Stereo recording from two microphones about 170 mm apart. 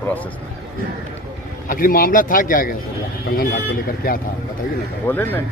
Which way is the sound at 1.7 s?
55° left (ahead or behind).